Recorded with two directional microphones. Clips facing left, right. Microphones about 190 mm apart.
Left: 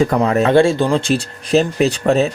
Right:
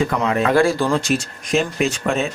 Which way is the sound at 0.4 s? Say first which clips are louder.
Left 3 dB; 25° left (ahead or behind).